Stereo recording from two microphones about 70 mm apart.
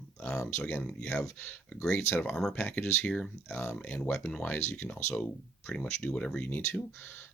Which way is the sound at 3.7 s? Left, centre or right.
Centre.